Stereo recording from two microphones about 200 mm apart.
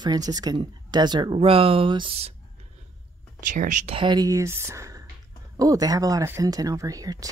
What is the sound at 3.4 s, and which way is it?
Speech, 40° right (ahead or behind).